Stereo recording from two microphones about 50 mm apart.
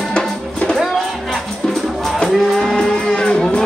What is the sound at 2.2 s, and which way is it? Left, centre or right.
Music, centre.